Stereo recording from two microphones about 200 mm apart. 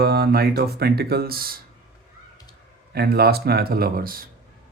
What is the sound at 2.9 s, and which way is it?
Speech, 50° right (ahead or behind).